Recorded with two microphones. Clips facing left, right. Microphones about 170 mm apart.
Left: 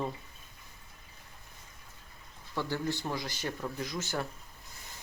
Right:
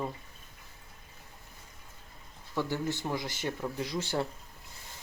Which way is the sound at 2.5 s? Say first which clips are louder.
Right 1 dB; 20° right (ahead or behind).